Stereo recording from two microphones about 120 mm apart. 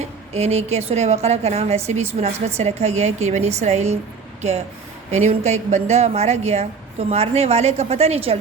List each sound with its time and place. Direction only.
0.3 s a woman's voice: 60° right (ahead or behind)
5.1 s a woman's voice: 65° right (ahead or behind)